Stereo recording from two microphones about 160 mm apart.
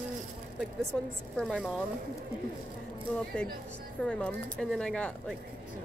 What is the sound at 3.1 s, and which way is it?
Speech, 5° left (ahead or behind).